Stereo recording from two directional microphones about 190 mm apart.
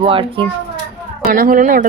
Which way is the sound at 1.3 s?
45° right (ahead or behind).